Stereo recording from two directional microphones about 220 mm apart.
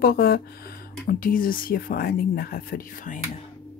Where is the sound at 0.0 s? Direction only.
45° left (ahead or behind).